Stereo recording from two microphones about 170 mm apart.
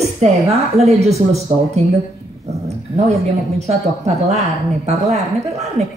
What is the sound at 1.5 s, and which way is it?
Speech, 40° right (ahead or behind).